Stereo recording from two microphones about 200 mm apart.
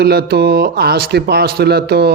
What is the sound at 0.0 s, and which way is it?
Speech, 50° right (ahead or behind).